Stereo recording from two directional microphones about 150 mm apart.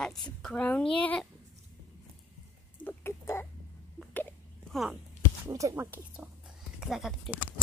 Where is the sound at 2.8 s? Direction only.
15° left (ahead or behind).